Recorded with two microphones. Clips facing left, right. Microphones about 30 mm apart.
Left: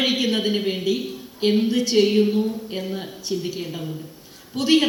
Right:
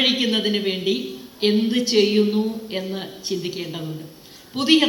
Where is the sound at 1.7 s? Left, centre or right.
Right.